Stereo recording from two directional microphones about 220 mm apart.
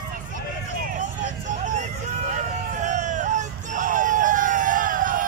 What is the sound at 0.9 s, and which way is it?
Vehicle, 35° right (ahead or behind).